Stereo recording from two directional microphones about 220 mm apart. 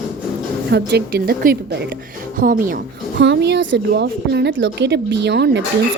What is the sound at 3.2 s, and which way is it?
Speech, 50° right (ahead or behind).